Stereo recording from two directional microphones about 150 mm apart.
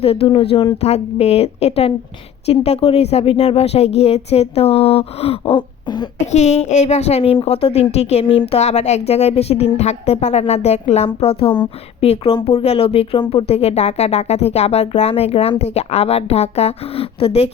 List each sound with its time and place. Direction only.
0.0 s a woman's voice: 40° left (ahead or behind)
6.3 s a woman's voice: 50° left (ahead or behind)